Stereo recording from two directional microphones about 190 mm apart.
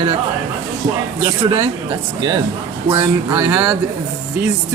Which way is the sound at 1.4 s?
30° right (ahead or behind).